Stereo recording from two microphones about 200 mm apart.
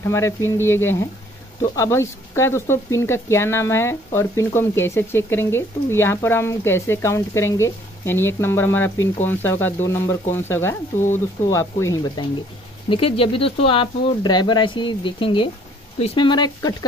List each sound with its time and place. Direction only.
0.0 s speech: 15° left (ahead or behind)
12.9 s speech: 30° left (ahead or behind)